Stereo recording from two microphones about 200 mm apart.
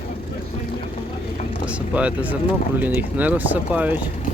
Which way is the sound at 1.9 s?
5° right (ahead or behind).